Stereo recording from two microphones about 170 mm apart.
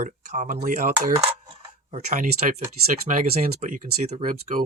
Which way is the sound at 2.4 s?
50° right (ahead or behind).